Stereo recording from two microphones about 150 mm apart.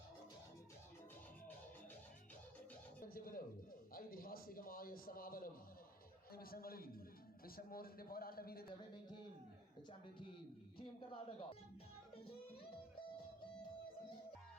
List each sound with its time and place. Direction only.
3.0 s music: 75° left (ahead or behind)
3.9 s a man's voice: 75° left (ahead or behind)
10.8 s speech: 40° left (ahead or behind)